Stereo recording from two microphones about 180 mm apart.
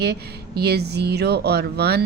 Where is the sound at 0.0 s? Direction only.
65° right (ahead or behind).